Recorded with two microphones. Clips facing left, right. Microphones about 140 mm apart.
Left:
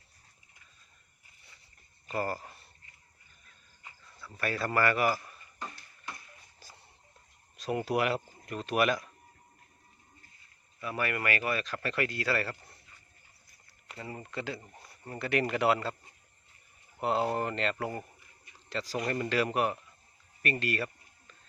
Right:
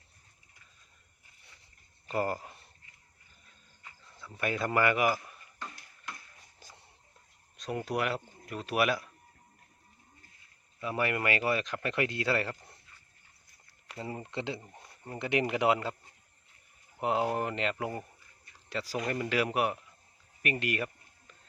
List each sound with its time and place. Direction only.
2.1 s speech: 20° right (ahead or behind)
4.4 s speech: 15° right (ahead or behind)
6.6 s a sound: 20° right (ahead or behind)
7.5 s speech: 5° left (ahead or behind)
10.8 s speech: 20° right (ahead or behind)
14.0 s speech: 20° right (ahead or behind)
17.0 s speech: 15° right (ahead or behind)
20.4 s a sound: 15° right (ahead or behind)